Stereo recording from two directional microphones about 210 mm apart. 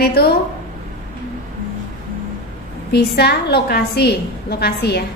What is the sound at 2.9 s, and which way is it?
A woman's voice, 50° left (ahead or behind).